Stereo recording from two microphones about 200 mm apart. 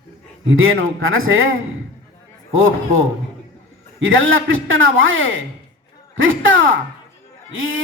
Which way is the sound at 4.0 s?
80° right.